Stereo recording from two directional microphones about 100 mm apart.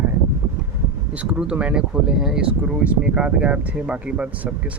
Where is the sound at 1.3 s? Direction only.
10° right (ahead or behind).